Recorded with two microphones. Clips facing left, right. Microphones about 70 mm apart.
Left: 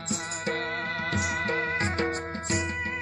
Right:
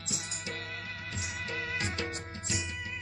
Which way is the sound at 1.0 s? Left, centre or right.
Left.